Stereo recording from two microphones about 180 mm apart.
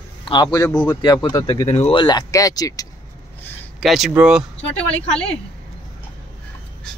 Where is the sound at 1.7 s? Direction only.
35° left (ahead or behind).